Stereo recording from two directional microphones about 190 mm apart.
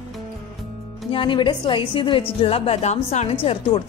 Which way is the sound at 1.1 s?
25° left (ahead or behind).